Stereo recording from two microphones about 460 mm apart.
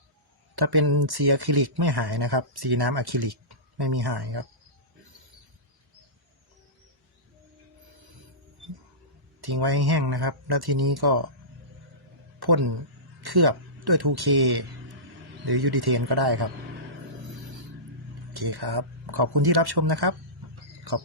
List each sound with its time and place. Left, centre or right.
0.5 s speech: right
9.4 s speech: right
12.4 s speech: right
18.3 s speech: right